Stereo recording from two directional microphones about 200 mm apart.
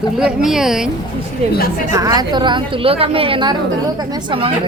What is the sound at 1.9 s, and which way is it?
A woman's voice, 20° right (ahead or behind).